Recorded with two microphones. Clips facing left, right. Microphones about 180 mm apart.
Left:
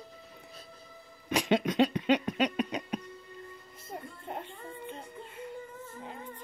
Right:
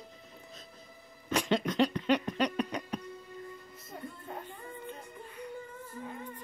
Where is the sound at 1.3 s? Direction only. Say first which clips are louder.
Left 2 dB; 15° left (ahead or behind).